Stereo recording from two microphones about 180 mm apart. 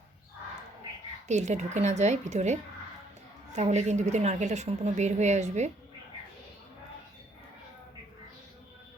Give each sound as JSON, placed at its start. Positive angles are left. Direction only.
{"t": 1.3, "sound": "a woman's voice", "side_deg": -40}